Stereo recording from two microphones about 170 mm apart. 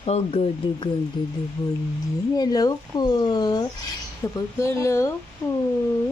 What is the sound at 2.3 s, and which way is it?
Speech, 20° left (ahead or behind).